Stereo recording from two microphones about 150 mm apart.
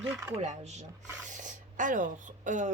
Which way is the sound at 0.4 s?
50° right (ahead or behind).